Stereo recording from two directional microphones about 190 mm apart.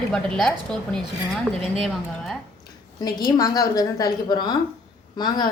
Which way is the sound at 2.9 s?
20° left (ahead or behind).